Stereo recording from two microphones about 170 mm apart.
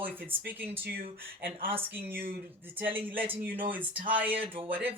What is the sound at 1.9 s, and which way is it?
Speech, 10° right (ahead or behind).